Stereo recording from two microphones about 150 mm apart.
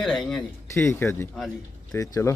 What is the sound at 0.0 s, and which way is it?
Speech, 5° left (ahead or behind).